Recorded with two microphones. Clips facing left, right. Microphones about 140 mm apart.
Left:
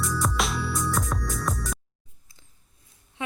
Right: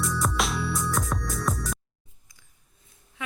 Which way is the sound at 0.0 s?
Centre (ahead or behind).